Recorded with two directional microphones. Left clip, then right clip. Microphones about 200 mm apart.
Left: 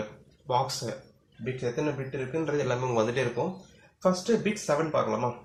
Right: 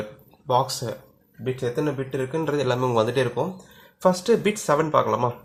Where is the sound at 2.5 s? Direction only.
45° right (ahead or behind).